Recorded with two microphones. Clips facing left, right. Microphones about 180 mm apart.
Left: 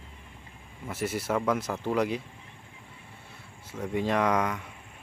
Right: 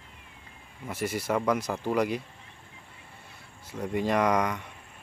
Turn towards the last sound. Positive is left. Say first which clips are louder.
# right 1 dB
turn(degrees=5)  # may be behind; listen again after turning